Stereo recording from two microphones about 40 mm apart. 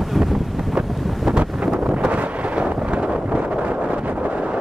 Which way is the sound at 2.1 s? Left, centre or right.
Right.